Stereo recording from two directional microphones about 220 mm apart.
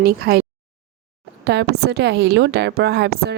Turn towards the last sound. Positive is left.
turn(degrees=-50)  # may be behind; listen again after turning